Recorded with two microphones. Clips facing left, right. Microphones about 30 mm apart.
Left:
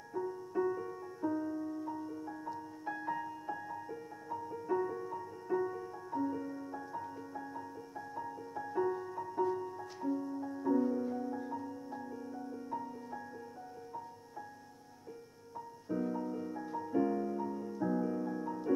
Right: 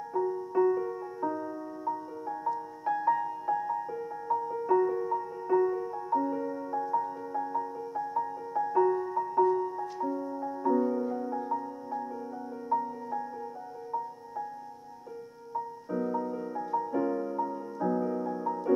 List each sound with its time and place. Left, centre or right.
0.1 s music: right
4.6 s music: right; by 13.2 s centre
16.0 s music: centre